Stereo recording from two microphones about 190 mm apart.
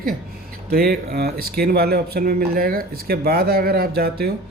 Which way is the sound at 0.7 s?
55° right (ahead or behind).